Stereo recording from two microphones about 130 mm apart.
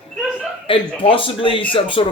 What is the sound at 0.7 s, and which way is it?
Speech, 40° left (ahead or behind).